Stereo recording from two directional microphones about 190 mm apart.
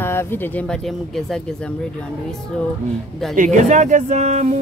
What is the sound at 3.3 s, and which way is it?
Speech, 40° right (ahead or behind).